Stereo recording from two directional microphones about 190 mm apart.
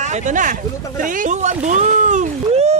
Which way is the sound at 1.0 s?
45° right (ahead or behind).